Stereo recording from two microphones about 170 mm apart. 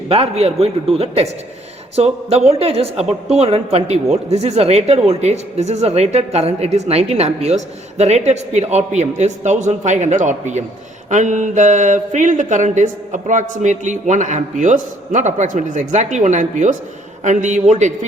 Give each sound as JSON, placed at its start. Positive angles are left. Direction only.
{"t": 0.1, "sound": "a woman's voice", "side_deg": -35}
{"t": 11.1, "sound": "mantra", "side_deg": -45}